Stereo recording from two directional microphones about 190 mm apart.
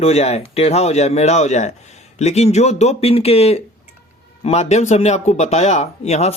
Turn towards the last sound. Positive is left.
turn(degrees=35)  # may be behind; listen again after turning